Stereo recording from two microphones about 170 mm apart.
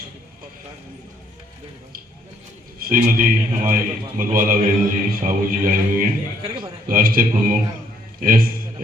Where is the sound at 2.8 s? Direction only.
55° right (ahead or behind).